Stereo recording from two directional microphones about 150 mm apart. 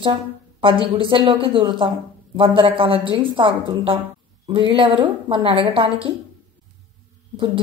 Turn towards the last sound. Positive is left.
turn(degrees=-35)  # may be behind; listen again after turning